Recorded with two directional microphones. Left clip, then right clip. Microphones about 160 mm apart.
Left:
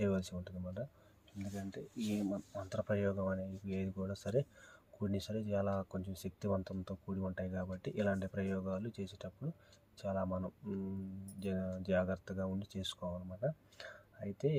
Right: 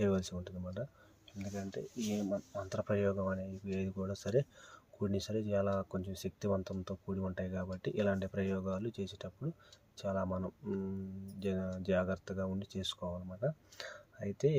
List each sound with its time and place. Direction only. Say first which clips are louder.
0.0 s speech: right 3 dB; 30° right (ahead or behind)
13.7 s speech: right 4 dB; 40° right (ahead or behind)